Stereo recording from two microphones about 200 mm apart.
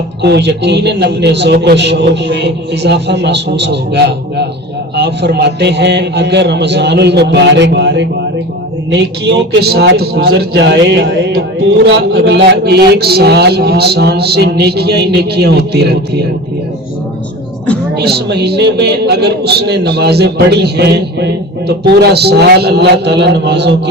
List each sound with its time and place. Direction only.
0.2 s speech: 55° right (ahead or behind)
17.9 s speech: 55° right (ahead or behind)